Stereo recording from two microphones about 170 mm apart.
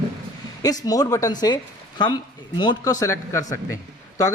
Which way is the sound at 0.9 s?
20° left (ahead or behind).